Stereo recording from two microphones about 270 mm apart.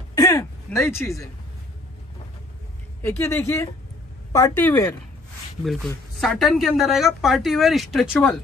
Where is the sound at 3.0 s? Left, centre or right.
Centre.